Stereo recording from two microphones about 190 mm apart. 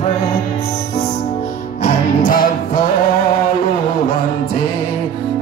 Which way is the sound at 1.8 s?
45° left (ahead or behind).